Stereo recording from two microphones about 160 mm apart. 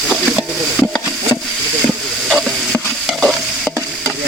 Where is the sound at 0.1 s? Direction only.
5° right (ahead or behind).